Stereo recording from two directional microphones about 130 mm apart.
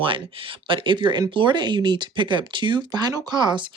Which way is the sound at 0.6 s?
40° right (ahead or behind).